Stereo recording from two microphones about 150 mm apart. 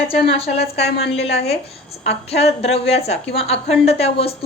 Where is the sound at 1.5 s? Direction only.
45° left (ahead or behind).